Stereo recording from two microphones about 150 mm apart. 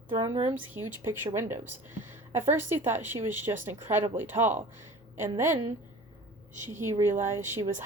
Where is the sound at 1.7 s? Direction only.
15° right (ahead or behind).